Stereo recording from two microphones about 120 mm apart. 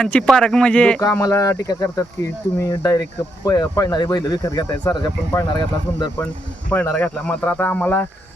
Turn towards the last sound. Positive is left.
turn(degrees=15)  # may be behind; listen again after turning